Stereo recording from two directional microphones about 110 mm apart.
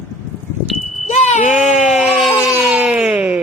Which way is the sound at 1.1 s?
90° left.